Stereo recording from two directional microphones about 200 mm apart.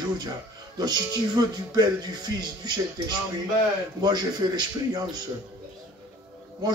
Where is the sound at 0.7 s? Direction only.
20° right (ahead or behind).